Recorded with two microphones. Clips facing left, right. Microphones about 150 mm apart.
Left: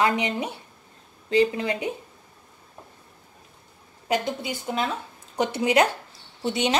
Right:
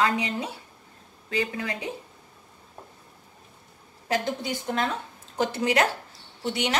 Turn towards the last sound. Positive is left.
turn(degrees=20)  # may be behind; listen again after turning